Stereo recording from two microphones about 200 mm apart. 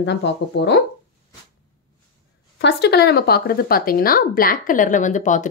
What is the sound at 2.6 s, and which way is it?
Speech, 60° left (ahead or behind).